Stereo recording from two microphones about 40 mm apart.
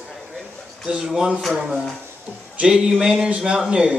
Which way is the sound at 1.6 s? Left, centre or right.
Centre.